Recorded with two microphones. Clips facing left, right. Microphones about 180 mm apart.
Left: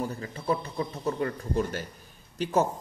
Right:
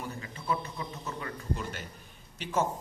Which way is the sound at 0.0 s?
35° left (ahead or behind).